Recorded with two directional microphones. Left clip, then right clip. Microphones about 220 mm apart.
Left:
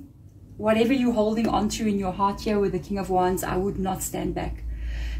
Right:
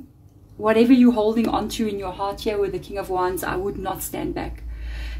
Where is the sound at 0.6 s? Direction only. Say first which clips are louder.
Right 5 dB; 45° right (ahead or behind).